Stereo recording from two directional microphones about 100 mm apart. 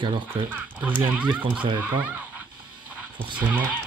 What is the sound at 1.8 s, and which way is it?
Speech, 25° right (ahead or behind).